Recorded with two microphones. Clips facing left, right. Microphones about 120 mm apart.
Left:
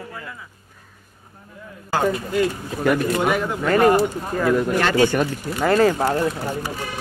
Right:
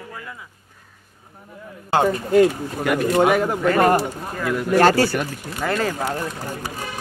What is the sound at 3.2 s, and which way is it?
Speech, 45° right (ahead or behind).